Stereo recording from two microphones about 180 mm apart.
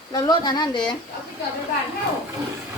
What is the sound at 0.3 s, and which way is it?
Speech, 25° left (ahead or behind).